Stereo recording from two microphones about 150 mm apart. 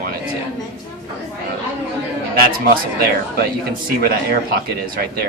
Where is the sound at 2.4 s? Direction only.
80° right.